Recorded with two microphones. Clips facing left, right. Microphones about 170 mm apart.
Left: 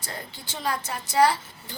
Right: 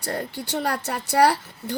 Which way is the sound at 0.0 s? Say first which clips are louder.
Right 10 dB; 70° right (ahead or behind).